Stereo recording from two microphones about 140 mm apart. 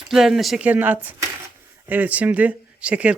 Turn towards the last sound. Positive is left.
turn(degrees=-10)  # may be behind; listen again after turning